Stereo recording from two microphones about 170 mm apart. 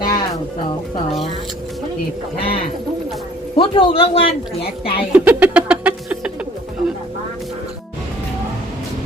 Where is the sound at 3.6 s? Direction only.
30° left (ahead or behind).